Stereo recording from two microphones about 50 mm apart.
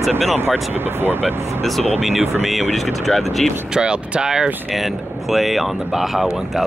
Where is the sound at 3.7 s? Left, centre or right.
Centre.